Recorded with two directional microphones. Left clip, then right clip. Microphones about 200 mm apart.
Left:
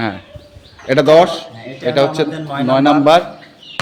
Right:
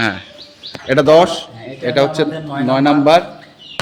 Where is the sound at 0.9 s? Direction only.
Centre (ahead or behind).